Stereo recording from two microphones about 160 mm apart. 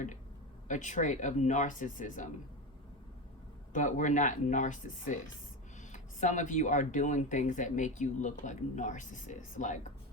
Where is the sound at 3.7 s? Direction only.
50° left (ahead or behind).